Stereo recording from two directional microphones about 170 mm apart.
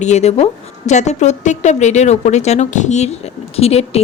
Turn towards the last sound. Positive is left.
turn(degrees=35)  # may be behind; listen again after turning